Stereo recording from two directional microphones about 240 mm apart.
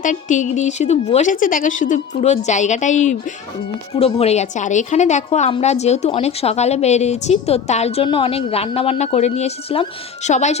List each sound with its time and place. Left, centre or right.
0.0 s a woman's voice: left